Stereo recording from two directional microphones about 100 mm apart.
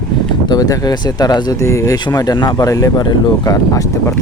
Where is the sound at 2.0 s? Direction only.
40° left (ahead or behind).